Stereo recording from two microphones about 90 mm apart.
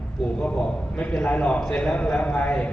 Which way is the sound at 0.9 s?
15° left (ahead or behind).